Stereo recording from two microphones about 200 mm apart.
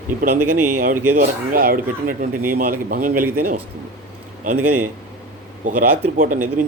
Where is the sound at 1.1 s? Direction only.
45° right (ahead or behind).